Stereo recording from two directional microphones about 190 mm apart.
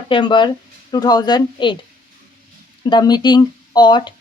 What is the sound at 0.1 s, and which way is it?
Speech, 25° left (ahead or behind).